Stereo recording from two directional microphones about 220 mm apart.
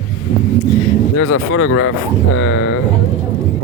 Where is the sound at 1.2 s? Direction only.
80° left.